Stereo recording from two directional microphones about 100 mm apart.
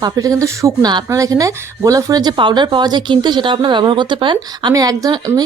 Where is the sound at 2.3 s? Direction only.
50° right (ahead or behind).